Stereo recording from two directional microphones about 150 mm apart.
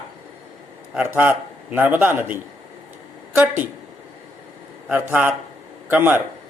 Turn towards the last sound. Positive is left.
turn(degrees=-15)  # may be behind; listen again after turning